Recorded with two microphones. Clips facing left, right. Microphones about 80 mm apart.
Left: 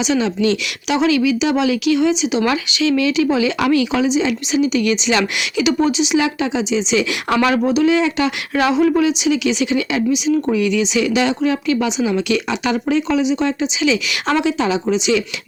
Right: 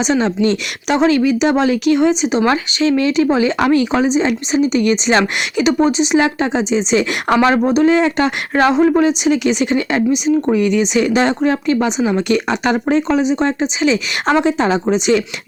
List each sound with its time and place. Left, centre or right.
0.0 s speech: right